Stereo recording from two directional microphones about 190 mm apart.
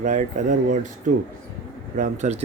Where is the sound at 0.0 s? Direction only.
40° right (ahead or behind).